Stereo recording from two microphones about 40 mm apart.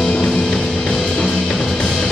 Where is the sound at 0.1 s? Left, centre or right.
Centre.